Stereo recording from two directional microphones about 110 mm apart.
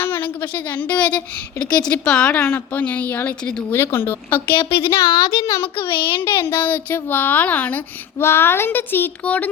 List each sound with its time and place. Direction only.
0.0 s a woman's voice: 15° left (ahead or behind)
4.9 s a woman's voice: 35° left (ahead or behind)
5.7 s a child's voice: 50° left (ahead or behind)
6.2 s a woman's voice: 20° left (ahead or behind)